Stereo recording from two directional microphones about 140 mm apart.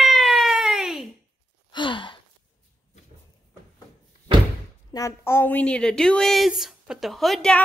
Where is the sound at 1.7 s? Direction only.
35° left (ahead or behind).